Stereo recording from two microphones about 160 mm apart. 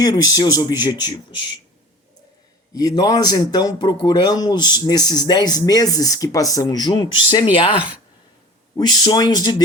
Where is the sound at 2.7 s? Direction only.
25° left (ahead or behind).